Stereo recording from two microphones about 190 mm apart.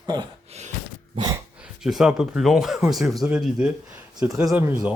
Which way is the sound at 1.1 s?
20° right (ahead or behind).